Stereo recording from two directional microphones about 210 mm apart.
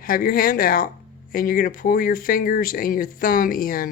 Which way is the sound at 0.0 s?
45° left (ahead or behind).